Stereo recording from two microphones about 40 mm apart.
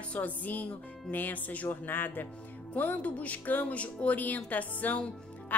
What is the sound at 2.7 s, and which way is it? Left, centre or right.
Speech, left.